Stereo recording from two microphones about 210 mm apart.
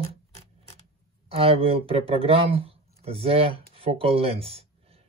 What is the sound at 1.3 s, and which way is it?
Speech, 25° right (ahead or behind).